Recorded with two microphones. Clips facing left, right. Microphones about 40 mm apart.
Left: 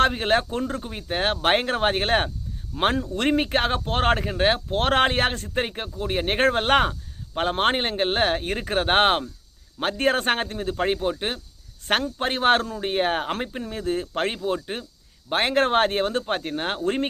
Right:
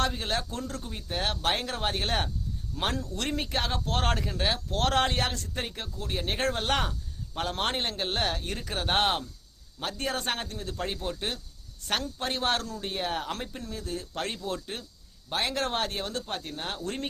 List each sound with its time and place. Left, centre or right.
0.0 s speech: left
15.3 s speech: left